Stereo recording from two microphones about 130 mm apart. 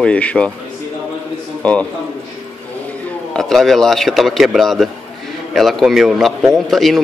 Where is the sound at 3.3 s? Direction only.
Centre (ahead or behind).